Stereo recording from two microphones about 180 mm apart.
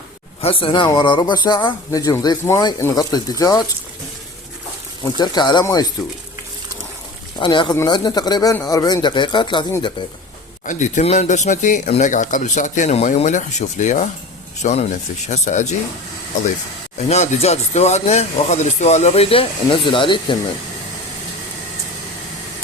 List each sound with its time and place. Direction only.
0.4 s speech: 30° left (ahead or behind)
5.1 s speech: 25° left (ahead or behind)
7.3 s speech: 25° left (ahead or behind)
10.7 s speech: 40° left (ahead or behind)
17.1 s speech: 35° left (ahead or behind)